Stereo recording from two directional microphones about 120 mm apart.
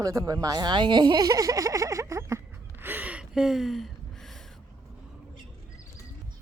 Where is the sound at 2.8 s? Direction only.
15° right (ahead or behind); by 4.4 s 5° left (ahead or behind).